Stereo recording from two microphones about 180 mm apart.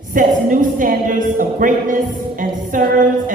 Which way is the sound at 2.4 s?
50° right (ahead or behind).